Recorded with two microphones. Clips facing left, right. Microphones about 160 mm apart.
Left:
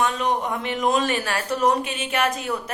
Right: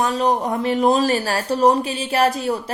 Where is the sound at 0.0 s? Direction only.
35° right (ahead or behind).